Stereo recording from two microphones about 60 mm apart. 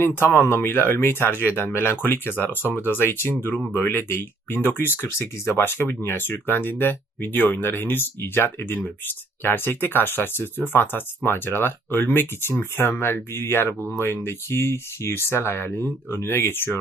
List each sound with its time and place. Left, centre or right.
0.0 s speech: left
2.6 s speech: right
2.8 s speech: left
13.7 s speech: centre
14.3 s speech: left